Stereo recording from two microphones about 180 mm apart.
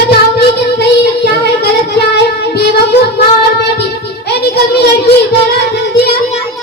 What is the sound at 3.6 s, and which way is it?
Music, 65° left (ahead or behind).